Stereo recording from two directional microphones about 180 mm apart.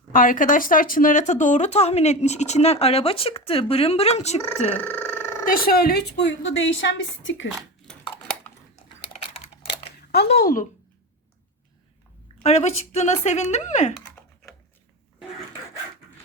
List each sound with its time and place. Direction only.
0.1 s speech: 50° left (ahead or behind)
4.8 s a sound: 10° left (ahead or behind)
5.5 s a woman's voice: 55° left (ahead or behind); by 7.4 s 90° left
9.6 s camera: 60° left (ahead or behind)
12.4 s speech: 35° left (ahead or behind)